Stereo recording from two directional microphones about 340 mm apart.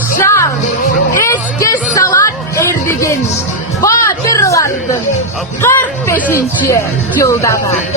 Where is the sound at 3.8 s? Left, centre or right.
Centre.